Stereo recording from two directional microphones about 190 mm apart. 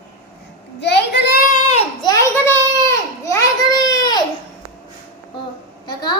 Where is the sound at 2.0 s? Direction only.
15° left (ahead or behind).